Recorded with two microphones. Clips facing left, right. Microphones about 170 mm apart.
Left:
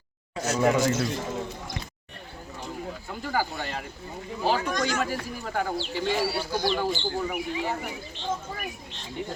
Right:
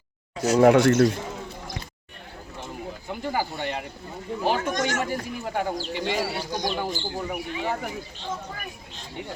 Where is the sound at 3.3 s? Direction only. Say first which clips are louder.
Right 1 dB; 15° right (ahead or behind).